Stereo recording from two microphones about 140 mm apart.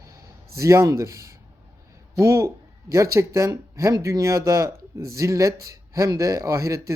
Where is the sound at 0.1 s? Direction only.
20° right (ahead or behind).